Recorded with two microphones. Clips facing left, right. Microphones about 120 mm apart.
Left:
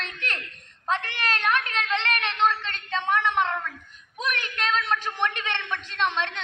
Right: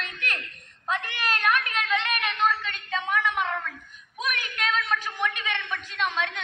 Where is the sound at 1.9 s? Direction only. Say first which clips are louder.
Even; 10° right (ahead or behind).